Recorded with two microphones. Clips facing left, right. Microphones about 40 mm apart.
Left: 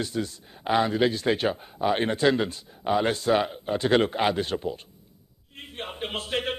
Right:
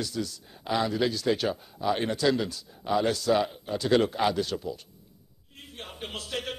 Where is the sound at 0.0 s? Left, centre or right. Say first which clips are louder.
Left 3 dB; left.